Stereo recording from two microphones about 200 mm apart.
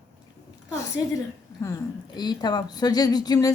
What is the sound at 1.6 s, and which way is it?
A woman's voice, 15° left (ahead or behind).